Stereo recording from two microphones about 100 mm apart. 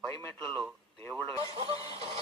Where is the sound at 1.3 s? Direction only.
35° left (ahead or behind).